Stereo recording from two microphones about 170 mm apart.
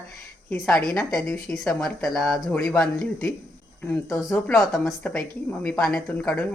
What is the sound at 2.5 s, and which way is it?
Speech, 15° left (ahead or behind).